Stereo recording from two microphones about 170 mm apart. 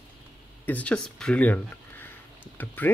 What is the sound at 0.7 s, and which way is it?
Speech, 10° left (ahead or behind).